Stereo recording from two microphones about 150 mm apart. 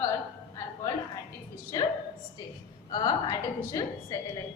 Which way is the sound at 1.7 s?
25° left (ahead or behind).